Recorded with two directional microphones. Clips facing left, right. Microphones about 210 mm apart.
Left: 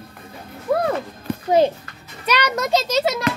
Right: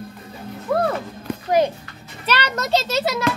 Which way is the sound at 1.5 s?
25° left (ahead or behind).